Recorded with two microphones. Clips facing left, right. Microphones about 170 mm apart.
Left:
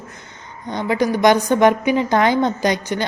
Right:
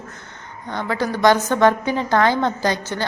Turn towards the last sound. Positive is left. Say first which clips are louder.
# left 3 dB
turn(degrees=20)  # may be behind; listen again after turning